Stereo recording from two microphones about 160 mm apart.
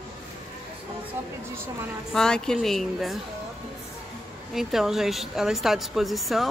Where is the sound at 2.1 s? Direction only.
5° left (ahead or behind).